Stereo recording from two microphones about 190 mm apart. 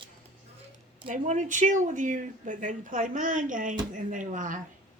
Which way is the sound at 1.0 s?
40° right (ahead or behind).